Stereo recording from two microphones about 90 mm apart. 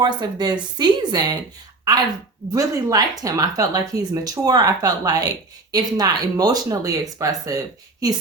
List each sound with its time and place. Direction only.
0.0 s speech: 50° right (ahead or behind)
2.5 s speech: 45° right (ahead or behind)